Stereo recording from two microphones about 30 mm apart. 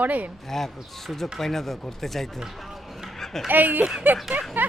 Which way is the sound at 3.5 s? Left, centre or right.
Right.